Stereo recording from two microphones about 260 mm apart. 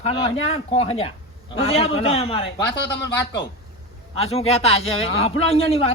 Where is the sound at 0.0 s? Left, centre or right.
Left.